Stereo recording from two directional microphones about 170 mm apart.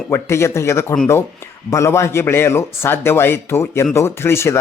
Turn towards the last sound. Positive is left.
turn(degrees=15)  # may be behind; listen again after turning